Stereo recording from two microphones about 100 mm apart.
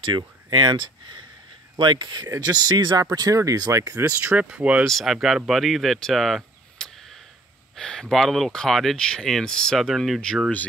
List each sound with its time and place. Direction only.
0.0 s speech: 50° right (ahead or behind)
3.1 s speech: 35° right (ahead or behind)
4.2 s speech: 15° right (ahead or behind)
4.8 s speech: centre (ahead or behind)